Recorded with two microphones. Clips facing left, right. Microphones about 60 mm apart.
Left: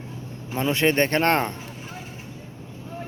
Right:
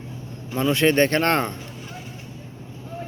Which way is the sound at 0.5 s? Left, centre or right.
Left.